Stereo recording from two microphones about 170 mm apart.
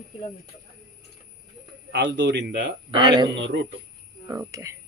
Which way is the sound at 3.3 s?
90° right.